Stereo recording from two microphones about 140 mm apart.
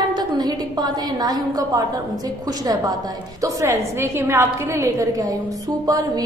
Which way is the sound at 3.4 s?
20° right (ahead or behind).